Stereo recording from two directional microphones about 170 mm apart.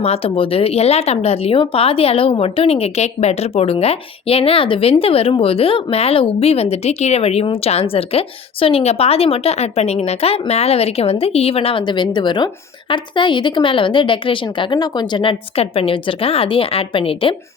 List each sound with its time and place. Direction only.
0.0 s a woman's voice: 35° left (ahead or behind)